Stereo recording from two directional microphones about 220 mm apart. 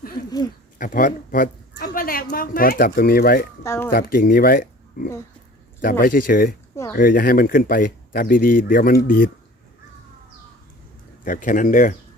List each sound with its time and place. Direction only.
0.3 s speech: 15° left (ahead or behind)
0.8 s speech: 35° left (ahead or behind)
1.8 s a sound: 40° left (ahead or behind)
2.3 s speech: 40° left (ahead or behind)
3.6 s a child's voice: 10° left (ahead or behind)
3.9 s speech: 40° left (ahead or behind)
11.3 s speech: 35° left (ahead or behind)